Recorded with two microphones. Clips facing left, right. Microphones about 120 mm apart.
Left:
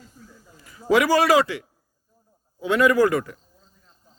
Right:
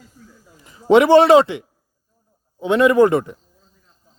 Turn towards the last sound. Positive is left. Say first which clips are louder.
# right 5 dB
turn(degrees=-25)  # may be behind; listen again after turning